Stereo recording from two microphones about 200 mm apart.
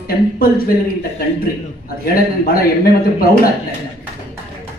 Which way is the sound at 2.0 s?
45° left (ahead or behind).